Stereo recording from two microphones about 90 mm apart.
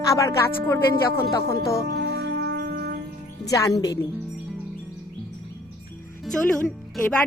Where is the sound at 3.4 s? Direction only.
40° left (ahead or behind).